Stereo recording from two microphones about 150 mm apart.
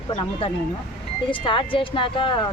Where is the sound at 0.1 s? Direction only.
35° left (ahead or behind).